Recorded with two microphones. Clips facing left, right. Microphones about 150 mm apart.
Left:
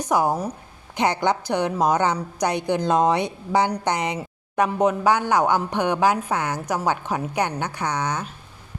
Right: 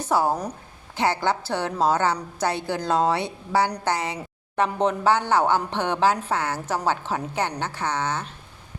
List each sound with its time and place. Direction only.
0.0 s a woman's voice: 15° left (ahead or behind)